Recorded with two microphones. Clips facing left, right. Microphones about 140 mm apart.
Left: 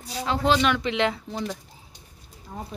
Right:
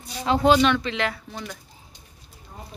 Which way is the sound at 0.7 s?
20° left (ahead or behind).